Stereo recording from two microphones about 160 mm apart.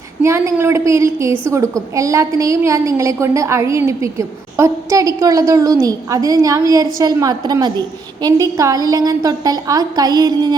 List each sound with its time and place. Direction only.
0.2 s a woman's voice: 15° right (ahead or behind)